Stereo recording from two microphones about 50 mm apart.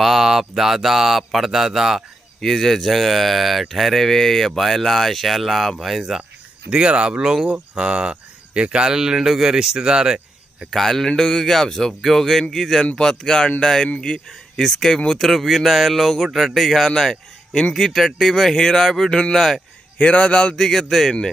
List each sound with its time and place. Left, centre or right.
0.0 s speech: centre
2.4 s speech: centre
6.7 s speech: right
10.7 s speech: centre
14.7 s speech: centre
17.8 s speech: centre
20.0 s speech: left